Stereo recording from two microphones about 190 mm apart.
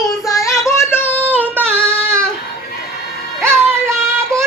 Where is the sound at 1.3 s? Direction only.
10° right (ahead or behind).